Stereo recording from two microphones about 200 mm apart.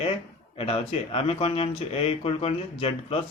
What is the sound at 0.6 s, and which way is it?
Speech, 30° left (ahead or behind).